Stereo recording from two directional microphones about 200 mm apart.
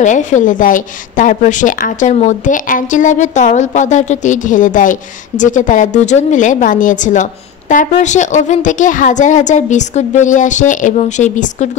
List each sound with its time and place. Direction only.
0.0 s a woman's voice: 40° left (ahead or behind)